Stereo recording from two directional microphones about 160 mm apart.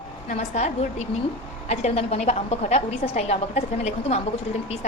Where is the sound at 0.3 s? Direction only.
45° left (ahead or behind).